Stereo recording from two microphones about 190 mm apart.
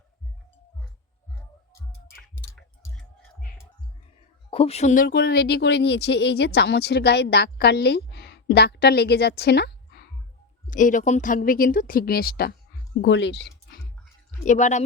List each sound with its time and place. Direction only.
2.1 s clicking: centre (ahead or behind)
4.5 s speech: 30° left (ahead or behind)
5.0 s speech: 55° left (ahead or behind)
10.7 s speech: 45° left (ahead or behind)
13.0 s speech: 70° left (ahead or behind)
14.4 s speech: 40° left (ahead or behind)